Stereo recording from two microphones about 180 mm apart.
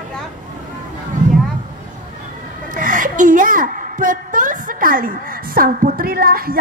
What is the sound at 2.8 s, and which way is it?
A woman's voice, 45° right (ahead or behind).